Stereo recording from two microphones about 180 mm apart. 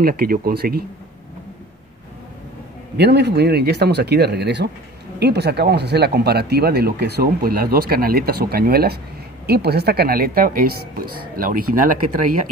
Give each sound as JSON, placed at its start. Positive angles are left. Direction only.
{"t": 0.0, "sound": "speech", "side_deg": -55}
{"t": 3.0, "sound": "speech", "side_deg": -70}